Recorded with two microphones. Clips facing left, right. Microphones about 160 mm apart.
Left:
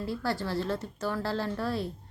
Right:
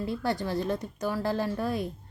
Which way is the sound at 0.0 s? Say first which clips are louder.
Right 2 dB; 20° right (ahead or behind).